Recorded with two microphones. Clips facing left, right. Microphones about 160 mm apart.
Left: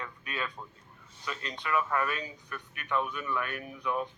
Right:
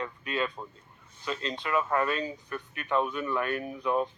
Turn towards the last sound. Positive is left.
turn(degrees=-30)  # may be behind; listen again after turning